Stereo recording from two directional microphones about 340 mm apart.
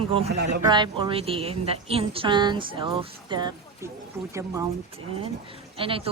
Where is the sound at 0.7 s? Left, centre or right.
Centre.